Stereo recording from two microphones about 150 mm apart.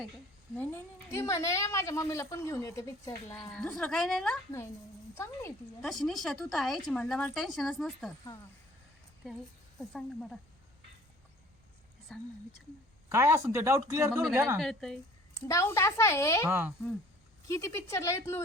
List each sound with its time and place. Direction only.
0.5 s a woman's voice: 15° left (ahead or behind)
3.5 s a woman's voice: 5° left (ahead or behind)
5.1 s a woman's voice: 20° left (ahead or behind)
5.8 s a woman's voice: centre (ahead or behind)
9.9 s a woman's voice: centre (ahead or behind)
12.1 s a woman's voice: 5° left (ahead or behind)
13.1 s speech: 15° right (ahead or behind)
14.6 s a woman's voice: 5° left (ahead or behind)
15.4 s a woman's voice: 20° left (ahead or behind)
16.5 s speech: 15° right (ahead or behind)
17.5 s a woman's voice: 20° left (ahead or behind)